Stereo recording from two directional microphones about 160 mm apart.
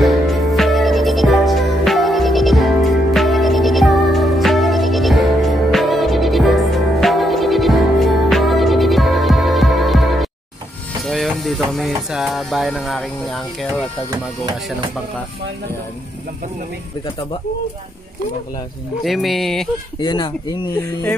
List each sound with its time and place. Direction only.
0.0 s music: centre (ahead or behind)
19.0 s speech: centre (ahead or behind)
20.0 s speech: 30° left (ahead or behind)